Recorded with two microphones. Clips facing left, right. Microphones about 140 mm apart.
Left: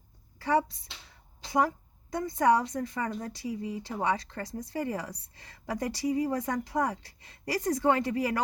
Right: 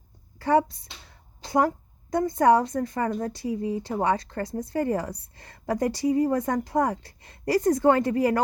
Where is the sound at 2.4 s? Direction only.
55° right (ahead or behind).